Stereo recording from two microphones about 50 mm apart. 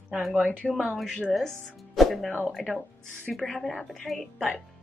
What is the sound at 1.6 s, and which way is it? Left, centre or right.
Music, centre.